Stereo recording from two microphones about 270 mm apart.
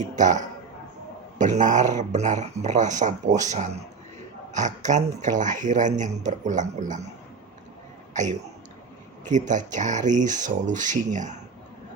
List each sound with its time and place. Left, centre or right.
0.0 s speech: right
8.1 s speech: right